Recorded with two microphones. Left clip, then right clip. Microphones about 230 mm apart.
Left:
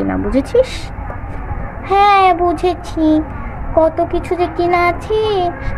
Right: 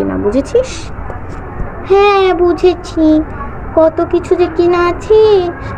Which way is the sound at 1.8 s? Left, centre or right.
Left.